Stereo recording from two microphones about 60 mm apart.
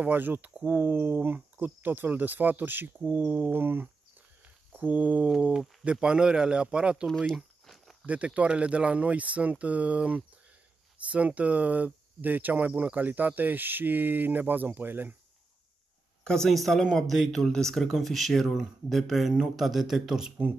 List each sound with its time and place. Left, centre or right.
0.0 s speech: right
5.5 s speech: centre
7.2 s a sound: centre
8.4 s speech: centre
16.3 s speech: centre